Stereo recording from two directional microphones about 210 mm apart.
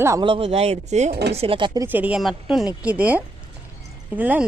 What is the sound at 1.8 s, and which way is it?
Speech, 10° right (ahead or behind).